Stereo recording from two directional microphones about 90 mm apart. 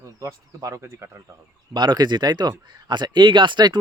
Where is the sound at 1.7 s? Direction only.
55° right (ahead or behind).